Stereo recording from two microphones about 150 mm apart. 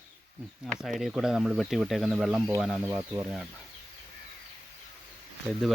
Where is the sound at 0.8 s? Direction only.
Centre (ahead or behind).